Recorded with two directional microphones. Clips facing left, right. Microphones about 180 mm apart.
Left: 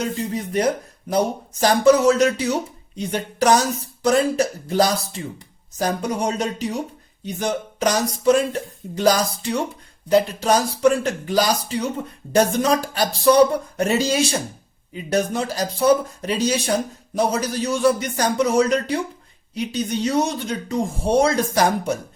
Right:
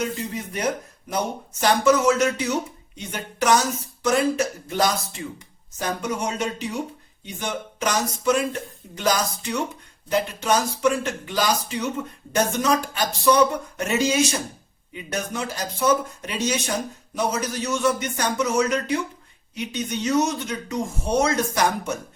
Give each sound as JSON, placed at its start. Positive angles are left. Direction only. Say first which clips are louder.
{"t": 0.0, "sound": "speech", "louder": "left 3 dB", "side_deg": 35}